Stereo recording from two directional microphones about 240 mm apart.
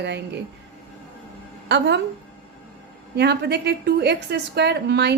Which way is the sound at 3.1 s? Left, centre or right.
Right.